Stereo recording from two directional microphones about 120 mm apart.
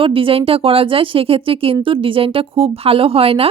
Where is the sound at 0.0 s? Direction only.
50° right (ahead or behind).